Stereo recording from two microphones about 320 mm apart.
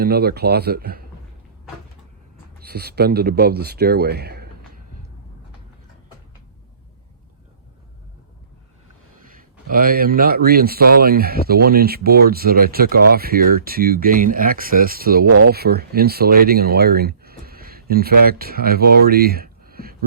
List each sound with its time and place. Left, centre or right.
0.0 s speech: right
2.6 s speech: right
9.3 s speech: right